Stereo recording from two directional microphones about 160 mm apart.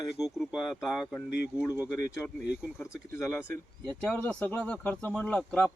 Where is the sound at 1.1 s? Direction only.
15° left (ahead or behind).